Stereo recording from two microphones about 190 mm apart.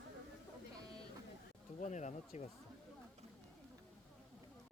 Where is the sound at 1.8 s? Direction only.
40° left (ahead or behind).